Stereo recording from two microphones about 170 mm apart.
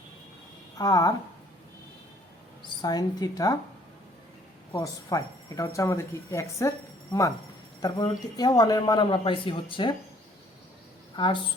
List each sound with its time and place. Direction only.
0.8 s speech: 20° left (ahead or behind)
2.8 s speech: 25° left (ahead or behind)
4.7 s speech: 20° left (ahead or behind)
11.2 s speech: 25° left (ahead or behind)